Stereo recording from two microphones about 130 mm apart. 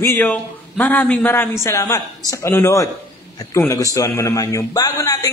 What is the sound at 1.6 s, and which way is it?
A man's voice, 25° left (ahead or behind).